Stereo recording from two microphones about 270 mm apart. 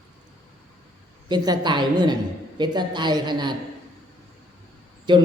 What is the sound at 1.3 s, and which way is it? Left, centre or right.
A man's voice, centre.